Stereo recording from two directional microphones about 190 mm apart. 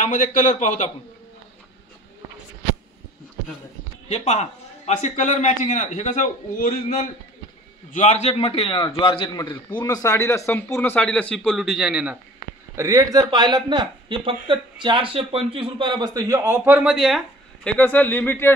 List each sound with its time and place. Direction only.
0.0 s a man's voice: 45° left (ahead or behind)
4.1 s a man's voice: 35° left (ahead or behind); by 12.2 s 5° right (ahead or behind)
12.7 s speech: 15° right (ahead or behind); by 18.5 s 10° left (ahead or behind)